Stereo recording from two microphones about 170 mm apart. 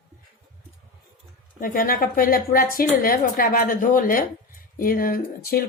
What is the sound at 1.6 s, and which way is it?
A woman's voice, 55° left (ahead or behind).